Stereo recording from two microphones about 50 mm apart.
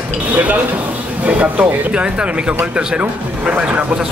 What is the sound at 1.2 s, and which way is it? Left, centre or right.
Speech, right.